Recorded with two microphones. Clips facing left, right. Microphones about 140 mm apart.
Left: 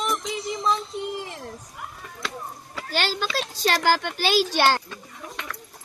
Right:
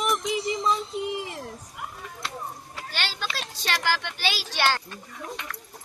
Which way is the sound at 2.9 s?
40° left (ahead or behind).